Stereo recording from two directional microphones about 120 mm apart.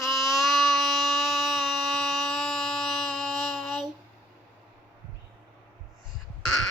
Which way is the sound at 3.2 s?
5° left (ahead or behind).